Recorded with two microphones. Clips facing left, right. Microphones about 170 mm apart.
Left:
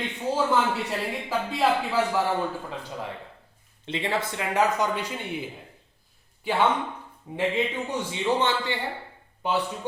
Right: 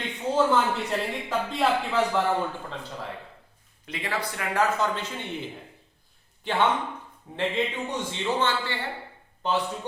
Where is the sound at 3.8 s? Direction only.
25° left (ahead or behind).